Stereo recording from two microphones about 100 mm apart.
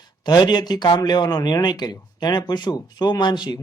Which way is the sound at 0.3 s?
45° left (ahead or behind).